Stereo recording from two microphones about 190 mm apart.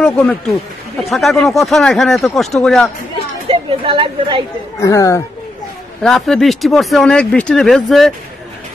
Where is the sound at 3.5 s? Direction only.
30° right (ahead or behind).